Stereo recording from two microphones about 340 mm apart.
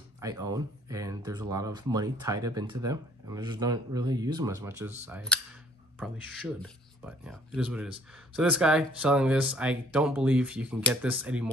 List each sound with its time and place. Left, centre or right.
0.2 s speech: centre